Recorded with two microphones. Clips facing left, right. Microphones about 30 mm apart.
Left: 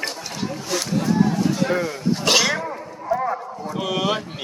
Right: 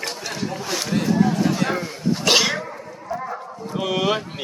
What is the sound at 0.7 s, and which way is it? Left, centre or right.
Speech, centre.